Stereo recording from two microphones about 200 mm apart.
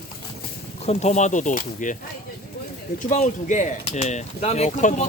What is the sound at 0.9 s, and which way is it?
Speech, 35° left (ahead or behind).